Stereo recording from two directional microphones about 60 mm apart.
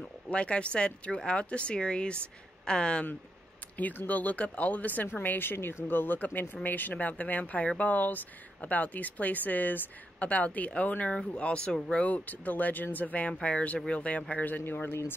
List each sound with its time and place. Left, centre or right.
0.0 s speech: centre
3.7 s speech: left
12.0 s speech: left